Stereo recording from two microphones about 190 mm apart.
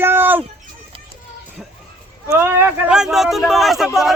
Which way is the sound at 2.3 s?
10° right (ahead or behind).